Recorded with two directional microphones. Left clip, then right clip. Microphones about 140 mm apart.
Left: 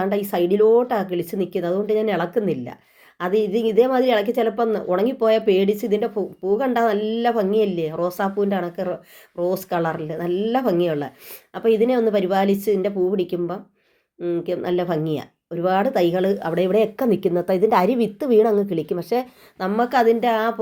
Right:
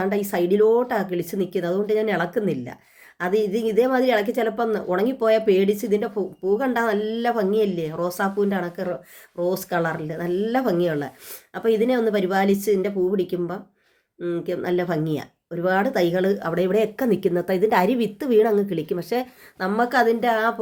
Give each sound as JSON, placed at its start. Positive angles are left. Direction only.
{"t": 0.0, "sound": "speech", "side_deg": 5}